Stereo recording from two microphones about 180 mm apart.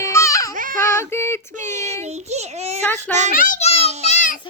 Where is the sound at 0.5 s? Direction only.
50° right (ahead or behind).